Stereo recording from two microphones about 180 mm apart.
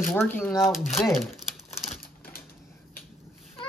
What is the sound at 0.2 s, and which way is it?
Speech, 10° left (ahead or behind).